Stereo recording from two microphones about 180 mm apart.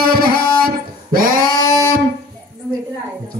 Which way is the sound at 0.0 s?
55° right (ahead or behind).